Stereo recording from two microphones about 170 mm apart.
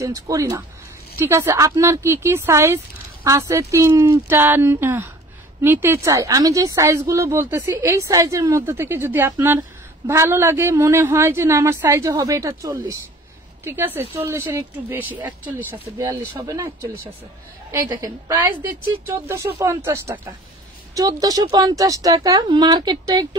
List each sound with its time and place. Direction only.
0.0 s a woman's voice: 20° right (ahead or behind)